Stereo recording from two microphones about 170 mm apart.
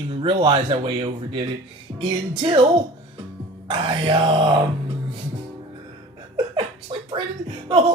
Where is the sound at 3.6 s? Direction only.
25° right (ahead or behind).